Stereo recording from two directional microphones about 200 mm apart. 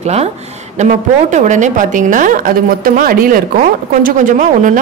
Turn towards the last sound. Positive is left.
turn(degrees=-40)  # may be behind; listen again after turning